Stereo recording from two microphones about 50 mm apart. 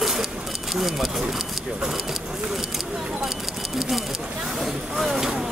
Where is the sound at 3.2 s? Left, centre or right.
Centre.